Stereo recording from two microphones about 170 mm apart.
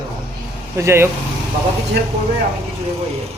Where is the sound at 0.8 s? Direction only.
15° right (ahead or behind).